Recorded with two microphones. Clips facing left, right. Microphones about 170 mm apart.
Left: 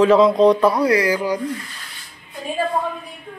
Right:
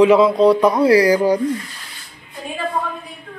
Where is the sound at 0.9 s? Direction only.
35° right (ahead or behind).